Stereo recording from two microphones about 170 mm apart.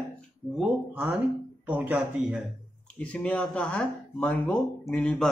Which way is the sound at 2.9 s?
5° left (ahead or behind).